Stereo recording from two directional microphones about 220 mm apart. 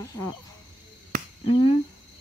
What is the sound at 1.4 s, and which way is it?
Cricket, 25° left (ahead or behind).